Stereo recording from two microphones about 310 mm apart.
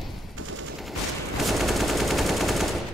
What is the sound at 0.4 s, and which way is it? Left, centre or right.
Machine gun, right.